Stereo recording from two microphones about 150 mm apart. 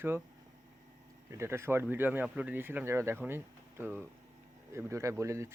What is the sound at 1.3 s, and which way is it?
Speech, 20° right (ahead or behind).